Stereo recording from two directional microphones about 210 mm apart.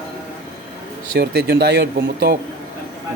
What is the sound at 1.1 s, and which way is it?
Speech, 50° right (ahead or behind).